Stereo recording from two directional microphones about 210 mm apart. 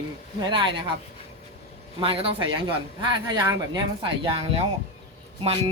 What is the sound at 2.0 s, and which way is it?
Speech, 25° right (ahead or behind).